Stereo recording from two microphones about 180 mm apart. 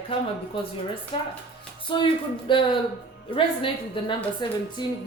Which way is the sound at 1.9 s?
25° left (ahead or behind).